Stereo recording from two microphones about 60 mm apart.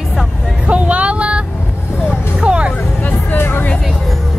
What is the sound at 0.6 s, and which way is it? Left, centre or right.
Music, right.